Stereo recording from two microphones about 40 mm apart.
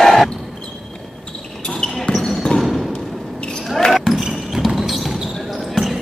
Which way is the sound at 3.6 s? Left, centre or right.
Centre.